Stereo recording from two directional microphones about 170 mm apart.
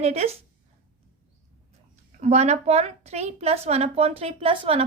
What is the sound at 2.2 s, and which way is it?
A woman's voice, 40° right (ahead or behind).